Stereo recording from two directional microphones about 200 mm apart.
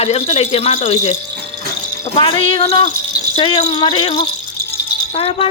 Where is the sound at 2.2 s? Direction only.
25° left (ahead or behind).